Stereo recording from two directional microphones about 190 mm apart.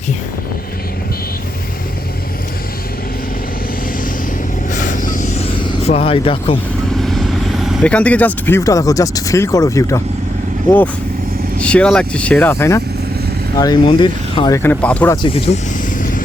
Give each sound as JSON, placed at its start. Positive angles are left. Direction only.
{"t": 4.7, "sound": "a sound", "side_deg": 40}
{"t": 7.0, "sound": "speech", "side_deg": 0}
{"t": 11.6, "sound": "speech", "side_deg": 5}
{"t": 15.1, "sound": "speech", "side_deg": 25}
{"t": 16.0, "sound": "vehicle", "side_deg": 45}